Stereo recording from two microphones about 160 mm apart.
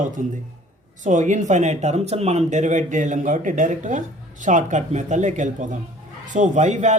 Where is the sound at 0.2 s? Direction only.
55° right (ahead or behind).